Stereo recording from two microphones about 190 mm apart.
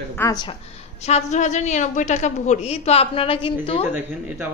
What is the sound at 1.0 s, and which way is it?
A woman's voice, 35° left (ahead or behind).